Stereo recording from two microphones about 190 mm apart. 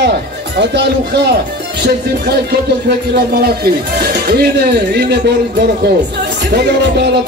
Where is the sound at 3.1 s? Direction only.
55° right (ahead or behind).